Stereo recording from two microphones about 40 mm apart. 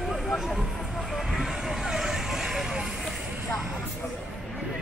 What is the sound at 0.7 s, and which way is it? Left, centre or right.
Vehicle, centre.